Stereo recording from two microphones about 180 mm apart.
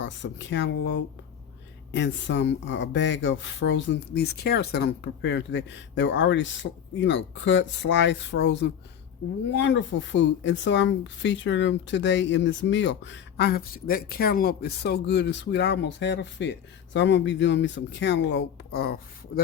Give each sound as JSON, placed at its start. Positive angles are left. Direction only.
{"t": 0.0, "sound": "speech", "side_deg": 80}